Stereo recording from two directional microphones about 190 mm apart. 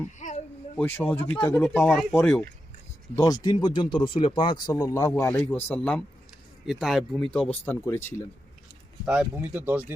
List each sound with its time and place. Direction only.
0.2 s a sound: 40° left (ahead or behind)
0.8 s speech: 10° left (ahead or behind)
3.2 s speech: 20° left (ahead or behind); by 7.3 s centre (ahead or behind)
7.6 s speech: 10° left (ahead or behind)
9.0 s speech: 5° right (ahead or behind)